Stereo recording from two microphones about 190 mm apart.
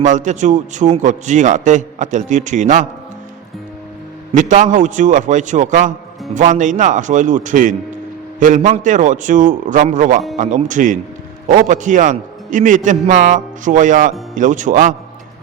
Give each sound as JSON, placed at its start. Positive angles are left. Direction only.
{"t": 0.0, "sound": "a man's voice", "side_deg": -40}
{"t": 4.3, "sound": "a man's voice", "side_deg": -40}